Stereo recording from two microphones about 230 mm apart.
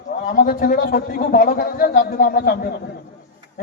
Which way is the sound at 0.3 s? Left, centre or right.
Left.